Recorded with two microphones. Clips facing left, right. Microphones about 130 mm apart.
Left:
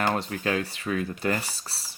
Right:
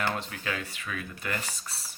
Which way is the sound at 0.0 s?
40° left (ahead or behind).